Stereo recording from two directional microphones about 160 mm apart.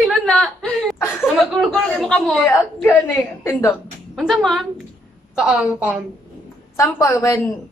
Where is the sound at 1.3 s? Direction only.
Centre (ahead or behind).